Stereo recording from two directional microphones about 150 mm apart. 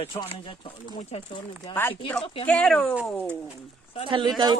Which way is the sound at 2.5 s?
5° left (ahead or behind).